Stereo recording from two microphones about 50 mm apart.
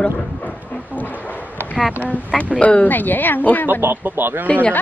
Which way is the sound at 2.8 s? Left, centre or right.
Left.